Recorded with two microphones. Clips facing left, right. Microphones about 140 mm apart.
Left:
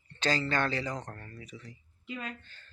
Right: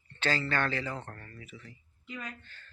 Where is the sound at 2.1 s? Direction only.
20° left (ahead or behind).